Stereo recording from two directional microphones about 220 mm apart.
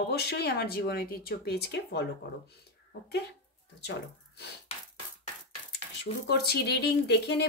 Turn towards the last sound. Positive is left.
turn(degrees=50)  # may be behind; listen again after turning